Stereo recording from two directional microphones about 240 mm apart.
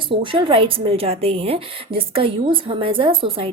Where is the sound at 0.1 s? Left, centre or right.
Right.